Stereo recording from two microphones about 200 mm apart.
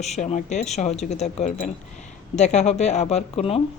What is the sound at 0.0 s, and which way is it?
A woman's voice, 35° left (ahead or behind).